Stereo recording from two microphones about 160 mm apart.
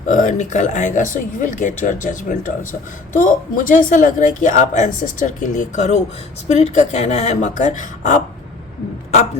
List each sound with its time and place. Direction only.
0.1 s speech: 50° left (ahead or behind)